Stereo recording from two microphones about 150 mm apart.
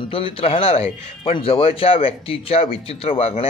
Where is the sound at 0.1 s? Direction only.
40° left (ahead or behind).